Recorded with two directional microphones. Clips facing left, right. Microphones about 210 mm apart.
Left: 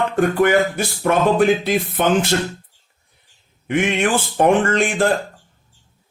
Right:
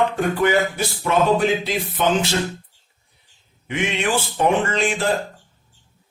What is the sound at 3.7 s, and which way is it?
A man's voice, 50° left (ahead or behind).